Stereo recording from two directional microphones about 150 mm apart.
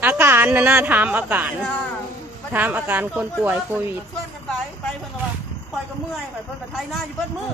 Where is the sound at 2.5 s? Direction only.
10° right (ahead or behind).